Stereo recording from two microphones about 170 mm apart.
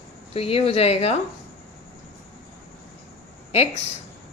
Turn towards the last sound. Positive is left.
turn(degrees=40)  # may be behind; listen again after turning